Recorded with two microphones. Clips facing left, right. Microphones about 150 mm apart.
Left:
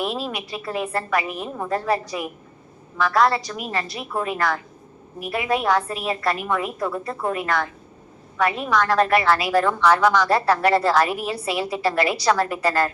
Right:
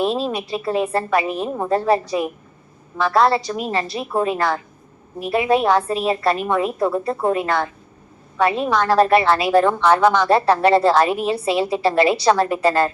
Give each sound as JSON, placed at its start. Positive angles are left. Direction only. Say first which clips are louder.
{"t": 0.0, "sound": "a woman's voice", "louder": "right 6 dB", "side_deg": -25}